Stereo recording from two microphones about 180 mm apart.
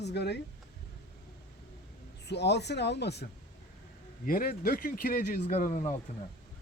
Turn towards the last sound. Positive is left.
turn(degrees=45)  # may be behind; listen again after turning